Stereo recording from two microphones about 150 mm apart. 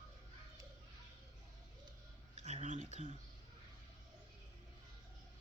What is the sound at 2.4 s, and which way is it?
Speech, 50° right (ahead or behind).